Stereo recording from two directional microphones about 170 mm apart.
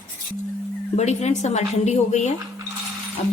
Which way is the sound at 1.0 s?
40° left (ahead or behind).